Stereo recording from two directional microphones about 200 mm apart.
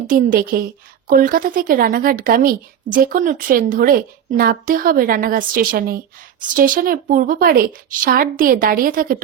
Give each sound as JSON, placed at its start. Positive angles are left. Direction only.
{"t": 0.1, "sound": "speech", "side_deg": -45}